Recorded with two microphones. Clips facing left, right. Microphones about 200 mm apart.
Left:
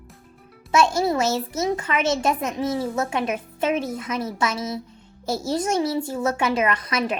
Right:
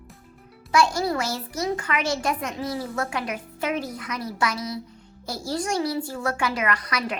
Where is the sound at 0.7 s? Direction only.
25° left (ahead or behind).